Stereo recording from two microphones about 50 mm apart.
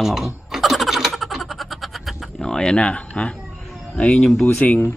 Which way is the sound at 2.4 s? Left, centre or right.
Centre.